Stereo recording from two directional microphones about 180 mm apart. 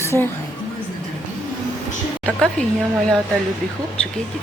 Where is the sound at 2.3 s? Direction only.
Centre (ahead or behind).